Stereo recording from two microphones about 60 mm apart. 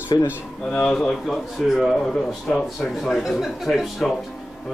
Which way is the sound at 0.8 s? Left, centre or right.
Centre.